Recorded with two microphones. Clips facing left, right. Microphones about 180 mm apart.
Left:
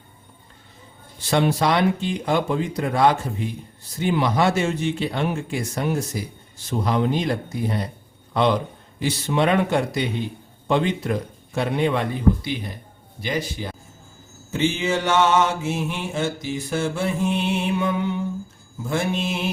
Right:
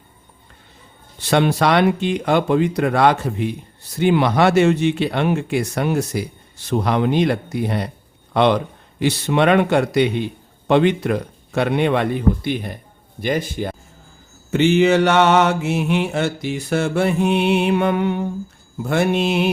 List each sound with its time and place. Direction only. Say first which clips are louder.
1.2 s a man's voice: right 3 dB; 70° right (ahead or behind); by 13.7 s 50° right (ahead or behind)
14.5 s speech: right 8 dB; 65° right (ahead or behind)
18.8 s mantra: right 6 dB; 65° right (ahead or behind)